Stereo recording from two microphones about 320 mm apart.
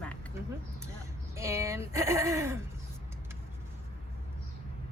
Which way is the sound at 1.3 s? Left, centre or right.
Centre.